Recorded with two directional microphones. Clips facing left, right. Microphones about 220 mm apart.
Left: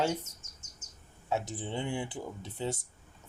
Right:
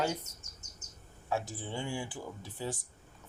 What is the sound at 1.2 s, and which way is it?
Speech, 20° left (ahead or behind).